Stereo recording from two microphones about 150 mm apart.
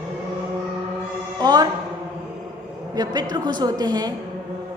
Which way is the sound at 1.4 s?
30° right (ahead or behind).